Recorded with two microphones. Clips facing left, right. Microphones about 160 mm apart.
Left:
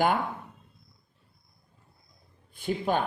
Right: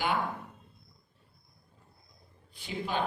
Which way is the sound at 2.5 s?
50° left (ahead or behind).